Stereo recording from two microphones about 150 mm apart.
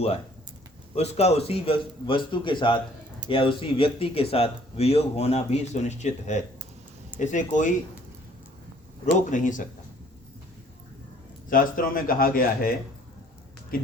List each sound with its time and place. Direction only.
0.9 s a man's voice: 45° left (ahead or behind)
9.3 s speech: 60° left (ahead or behind)
11.4 s speech: 70° left (ahead or behind)